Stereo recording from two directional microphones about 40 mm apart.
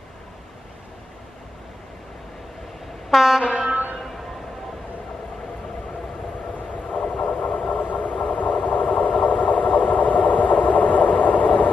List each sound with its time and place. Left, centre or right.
3.1 s train: centre
3.6 s a sound: right
6.7 s vehicle: left